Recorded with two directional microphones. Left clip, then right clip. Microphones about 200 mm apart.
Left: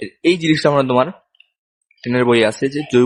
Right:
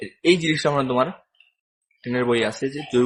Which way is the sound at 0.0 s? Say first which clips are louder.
Left 3 dB; 35° left (ahead or behind).